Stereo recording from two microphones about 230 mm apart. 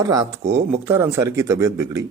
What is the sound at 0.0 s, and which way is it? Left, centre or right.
Speech, centre.